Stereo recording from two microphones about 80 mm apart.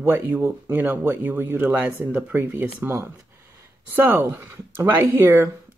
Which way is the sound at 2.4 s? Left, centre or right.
Right.